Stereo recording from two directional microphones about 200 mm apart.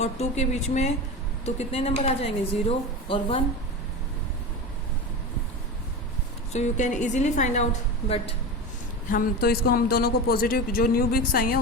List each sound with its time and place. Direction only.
0.0 s a woman's voice: 35° left (ahead or behind)
6.5 s a woman's voice: 35° left (ahead or behind)
9.0 s a man's voice: 45° left (ahead or behind)